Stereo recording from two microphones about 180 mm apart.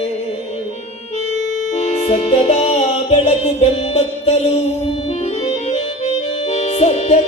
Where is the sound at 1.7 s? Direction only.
40° left (ahead or behind).